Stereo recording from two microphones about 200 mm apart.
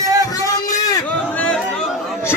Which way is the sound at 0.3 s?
15° left (ahead or behind).